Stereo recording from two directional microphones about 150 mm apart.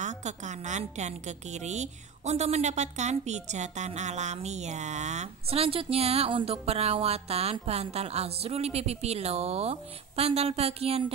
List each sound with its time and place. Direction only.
0.0 s a woman's voice: 55° right (ahead or behind)